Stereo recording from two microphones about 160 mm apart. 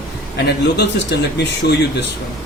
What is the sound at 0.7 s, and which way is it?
Speech, 90° left.